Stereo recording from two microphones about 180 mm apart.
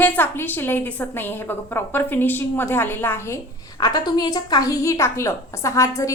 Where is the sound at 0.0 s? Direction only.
10° left (ahead or behind).